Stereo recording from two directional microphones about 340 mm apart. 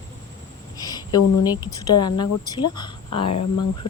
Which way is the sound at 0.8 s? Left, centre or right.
Centre.